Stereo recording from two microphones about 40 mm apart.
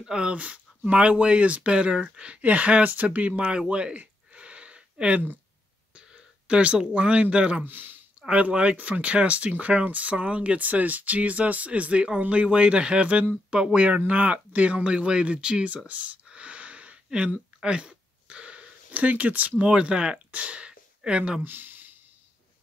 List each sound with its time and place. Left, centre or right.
0.0 s speech: right
0.4 s speech: right
3.5 s speech: right
4.0 s a sound: right
6.9 s speech: right
7.6 s speech: right
8.3 s speech: right
13.5 s speech: centre
13.7 s speech: right
15.9 s a sound: right
18.9 s speech: right
19.6 s speech: right
20.2 s a sound: right
21.5 s a sound: right